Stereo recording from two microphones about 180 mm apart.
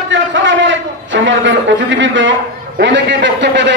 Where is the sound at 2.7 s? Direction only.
80° right.